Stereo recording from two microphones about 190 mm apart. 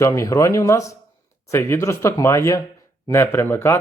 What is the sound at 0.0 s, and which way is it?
Speech, 15° left (ahead or behind).